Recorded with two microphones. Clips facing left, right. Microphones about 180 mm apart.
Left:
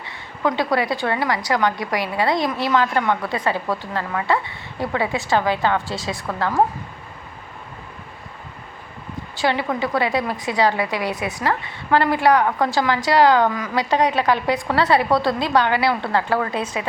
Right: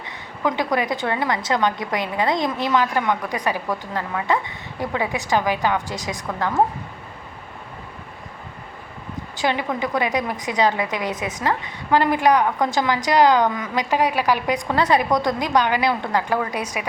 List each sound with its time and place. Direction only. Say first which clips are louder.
0.4 s a woman's voice: left 1 dB; 20° right (ahead or behind)
9.4 s a woman's voice: left 2 dB; 20° right (ahead or behind)
14.0 s a woman's voice: left 1 dB; 25° left (ahead or behind)
14.4 s a woman's voice: left 1 dB; 20° right (ahead or behind)